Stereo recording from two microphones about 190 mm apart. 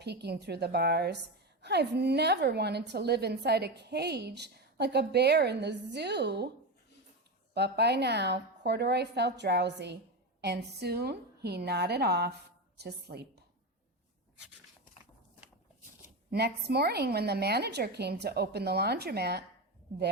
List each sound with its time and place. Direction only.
0.0 s a woman's voice: 60° right (ahead or behind)
7.5 s a woman's voice: 60° right (ahead or behind)
16.3 s a woman's voice: 60° right (ahead or behind)